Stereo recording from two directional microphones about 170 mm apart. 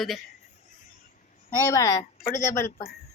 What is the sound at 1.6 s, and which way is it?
A woman's voice, 20° left (ahead or behind).